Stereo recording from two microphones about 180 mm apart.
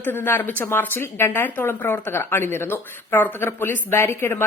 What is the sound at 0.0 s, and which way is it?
Speech, 10° left (ahead or behind).